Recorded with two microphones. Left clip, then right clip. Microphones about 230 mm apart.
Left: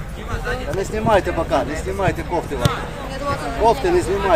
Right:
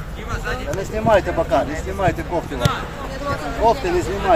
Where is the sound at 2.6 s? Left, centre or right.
Centre.